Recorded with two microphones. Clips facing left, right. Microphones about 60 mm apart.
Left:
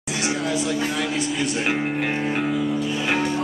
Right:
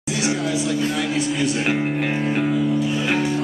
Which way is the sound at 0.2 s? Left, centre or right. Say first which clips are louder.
Right 1 dB; centre.